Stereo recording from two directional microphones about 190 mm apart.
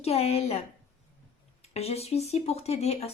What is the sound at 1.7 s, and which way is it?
Speech, 35° left (ahead or behind).